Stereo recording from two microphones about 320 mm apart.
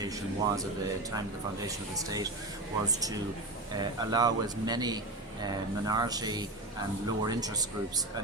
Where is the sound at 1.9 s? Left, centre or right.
Centre.